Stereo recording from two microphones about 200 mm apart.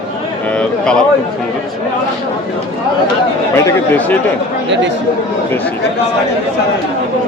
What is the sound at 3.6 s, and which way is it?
Speech, 10° left (ahead or behind).